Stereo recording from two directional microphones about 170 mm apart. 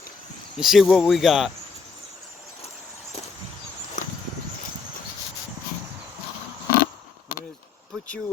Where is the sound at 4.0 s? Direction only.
45° left (ahead or behind).